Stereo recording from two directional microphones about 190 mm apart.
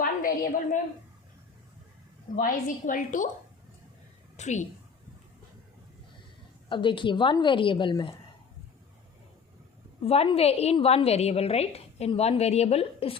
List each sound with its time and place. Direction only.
0.0 s a sound: 45° left (ahead or behind)
2.3 s a woman's voice: 45° left (ahead or behind)
4.4 s a woman's voice: 40° left (ahead or behind)
6.7 s a woman's voice: 25° left (ahead or behind)
10.0 s a woman's voice: 30° left (ahead or behind)